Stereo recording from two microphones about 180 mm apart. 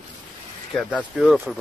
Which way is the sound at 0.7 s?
Centre (ahead or behind).